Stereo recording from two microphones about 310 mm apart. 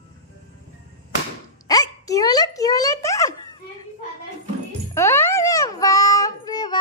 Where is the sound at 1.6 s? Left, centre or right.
Centre.